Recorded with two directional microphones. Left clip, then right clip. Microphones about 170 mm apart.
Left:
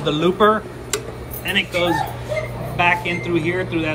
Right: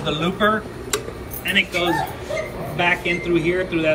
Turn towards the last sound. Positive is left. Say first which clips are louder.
# right 1 dB
turn(degrees=5)  # may be behind; listen again after turning